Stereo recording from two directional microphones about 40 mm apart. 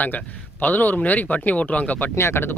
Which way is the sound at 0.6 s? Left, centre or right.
Left.